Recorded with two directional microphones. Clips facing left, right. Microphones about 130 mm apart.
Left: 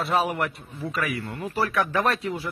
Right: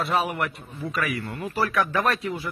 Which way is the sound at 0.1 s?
30° left (ahead or behind).